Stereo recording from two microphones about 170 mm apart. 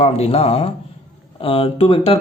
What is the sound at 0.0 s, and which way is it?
Speech, 35° left (ahead or behind).